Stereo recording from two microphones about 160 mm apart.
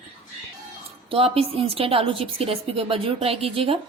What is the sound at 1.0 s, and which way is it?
A woman's voice, 35° right (ahead or behind).